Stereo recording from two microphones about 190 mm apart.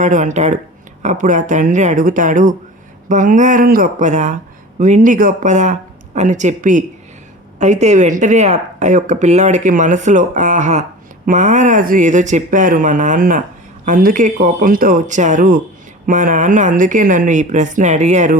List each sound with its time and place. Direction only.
0.0 s speech: 40° right (ahead or behind)